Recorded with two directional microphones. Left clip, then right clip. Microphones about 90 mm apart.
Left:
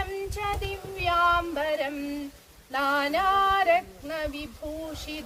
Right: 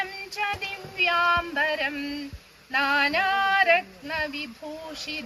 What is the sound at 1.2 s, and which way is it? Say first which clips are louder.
Speech: right 1 dB; 35° right (ahead or behind).